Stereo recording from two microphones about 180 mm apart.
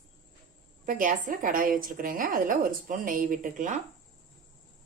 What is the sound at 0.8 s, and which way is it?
A woman's voice, 45° right (ahead or behind).